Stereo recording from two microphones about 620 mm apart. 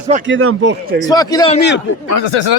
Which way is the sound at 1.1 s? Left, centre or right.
Centre.